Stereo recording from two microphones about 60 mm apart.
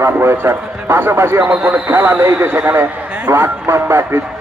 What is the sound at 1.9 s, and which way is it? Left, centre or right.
A man's voice, right.